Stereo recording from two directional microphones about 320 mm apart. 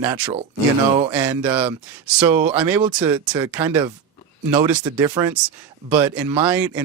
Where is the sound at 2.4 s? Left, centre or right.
Right.